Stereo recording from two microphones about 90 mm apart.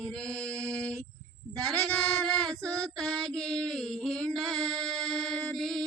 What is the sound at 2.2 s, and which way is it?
Female singing, 5° left (ahead or behind).